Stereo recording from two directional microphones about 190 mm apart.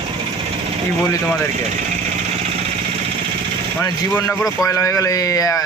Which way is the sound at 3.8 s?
10° left (ahead or behind).